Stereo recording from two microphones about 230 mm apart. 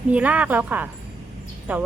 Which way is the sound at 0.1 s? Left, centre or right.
Centre.